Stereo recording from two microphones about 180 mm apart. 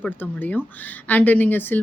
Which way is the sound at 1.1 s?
10° left (ahead or behind).